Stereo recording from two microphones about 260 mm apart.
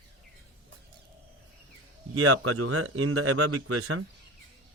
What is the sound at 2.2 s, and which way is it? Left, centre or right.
Speech, right.